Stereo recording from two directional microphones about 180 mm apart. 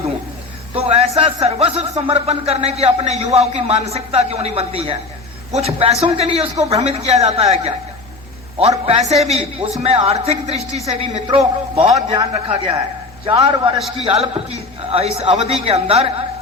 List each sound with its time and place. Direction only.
0.7 s a man's voice: 35° right (ahead or behind)